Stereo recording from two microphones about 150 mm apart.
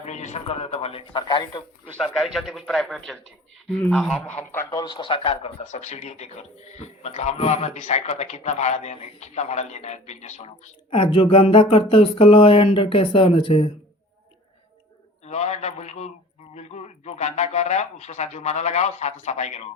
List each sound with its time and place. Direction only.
0.0 s speech: 50° left (ahead or behind); by 1.6 s 30° left (ahead or behind)
2.0 s speech: centre (ahead or behind)
4.6 s speech: 25° left (ahead or behind); by 10.5 s 50° left (ahead or behind)
10.9 s speech: 35° left (ahead or behind)
15.3 s speech: 50° left (ahead or behind)